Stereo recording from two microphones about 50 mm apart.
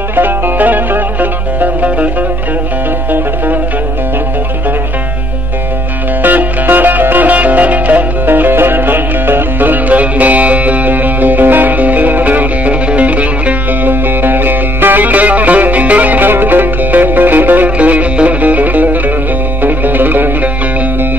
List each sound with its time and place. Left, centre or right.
0.1 s music: right
6.2 s music: right
14.0 s music: right